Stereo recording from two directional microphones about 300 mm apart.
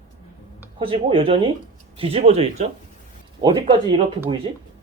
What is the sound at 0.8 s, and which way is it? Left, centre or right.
Speech, centre.